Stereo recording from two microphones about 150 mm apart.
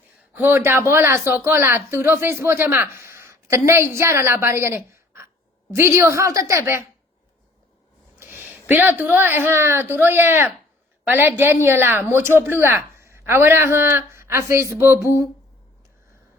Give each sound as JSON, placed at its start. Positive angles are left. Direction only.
{"t": 0.3, "sound": "a woman's voice", "side_deg": -15}
{"t": 8.2, "sound": "a woman's voice", "side_deg": -15}